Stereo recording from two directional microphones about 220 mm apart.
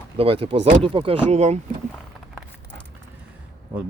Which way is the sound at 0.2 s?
25° right (ahead or behind).